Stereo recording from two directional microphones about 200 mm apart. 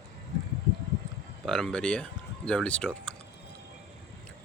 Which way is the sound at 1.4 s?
5° left (ahead or behind).